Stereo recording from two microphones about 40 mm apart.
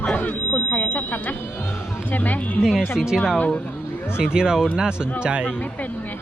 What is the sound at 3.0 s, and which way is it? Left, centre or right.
Speech, centre.